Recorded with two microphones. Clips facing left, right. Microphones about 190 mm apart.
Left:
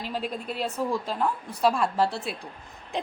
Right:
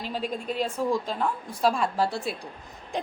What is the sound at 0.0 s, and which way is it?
A woman's voice, 5° left (ahead or behind).